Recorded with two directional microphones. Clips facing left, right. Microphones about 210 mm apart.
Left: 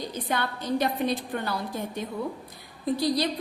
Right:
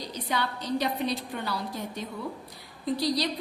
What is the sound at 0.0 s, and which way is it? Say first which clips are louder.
A woman's voice: left 2 dB; 50° left (ahead or behind).